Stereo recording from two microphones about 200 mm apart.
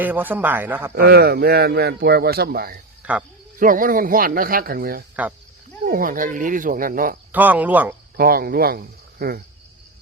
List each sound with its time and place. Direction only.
0.0 s speech: 10° right (ahead or behind)
0.9 s speech: 50° right (ahead or behind)
3.0 s speech: 5° right (ahead or behind)
3.6 s speech: 45° right (ahead or behind)
7.3 s speech: 10° right (ahead or behind)
8.1 s speech: 50° right (ahead or behind)